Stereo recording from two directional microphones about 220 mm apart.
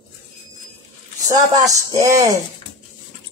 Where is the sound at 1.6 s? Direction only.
15° right (ahead or behind).